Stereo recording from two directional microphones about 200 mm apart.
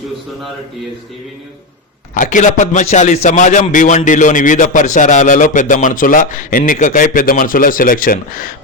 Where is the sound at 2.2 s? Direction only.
40° left (ahead or behind).